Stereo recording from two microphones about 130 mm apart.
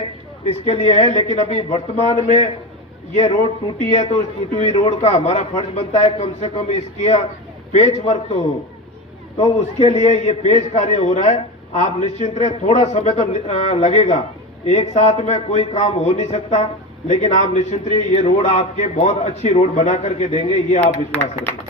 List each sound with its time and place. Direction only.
0.4 s a man's voice: 55° left (ahead or behind)
3.8 s a man's voice: 60° left (ahead or behind)
9.4 s a man's voice: 55° left (ahead or behind)